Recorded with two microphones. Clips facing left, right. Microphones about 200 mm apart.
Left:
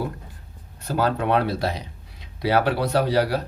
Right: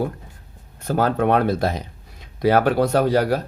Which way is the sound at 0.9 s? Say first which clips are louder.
Right 3 dB; 50° right (ahead or behind).